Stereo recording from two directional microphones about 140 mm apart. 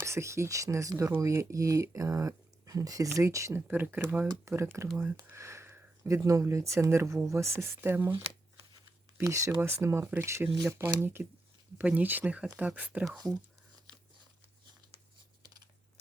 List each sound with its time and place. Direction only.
0.0 s speech: 20° right (ahead or behind)
9.1 s speech: 20° right (ahead or behind)
13.1 s speech: 25° right (ahead or behind)